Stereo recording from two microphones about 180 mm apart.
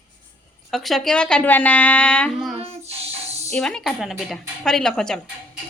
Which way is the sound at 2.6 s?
35° right (ahead or behind).